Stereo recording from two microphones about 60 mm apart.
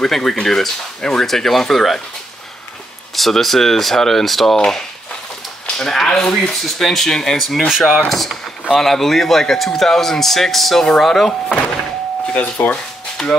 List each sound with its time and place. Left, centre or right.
0.0 s speech: centre
3.2 s speech: centre
5.7 s speech: centre
12.7 s a sound: centre